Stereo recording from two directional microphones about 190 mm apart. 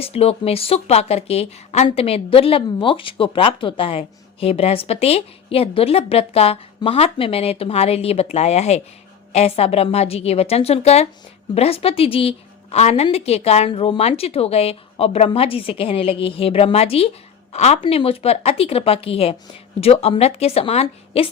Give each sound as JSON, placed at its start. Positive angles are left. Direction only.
{"t": 0.0, "sound": "a woman's voice", "side_deg": 30}